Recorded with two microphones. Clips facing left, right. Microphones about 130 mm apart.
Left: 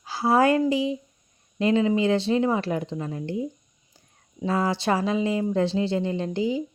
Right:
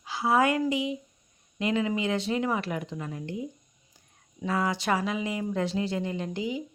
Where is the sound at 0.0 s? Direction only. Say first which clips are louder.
Left 4 dB; 35° left (ahead or behind).